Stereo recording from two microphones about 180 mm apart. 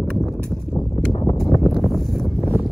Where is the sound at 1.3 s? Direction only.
Centre (ahead or behind).